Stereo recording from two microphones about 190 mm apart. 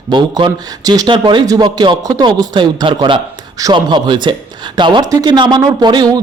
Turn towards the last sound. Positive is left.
turn(degrees=-20)  # may be behind; listen again after turning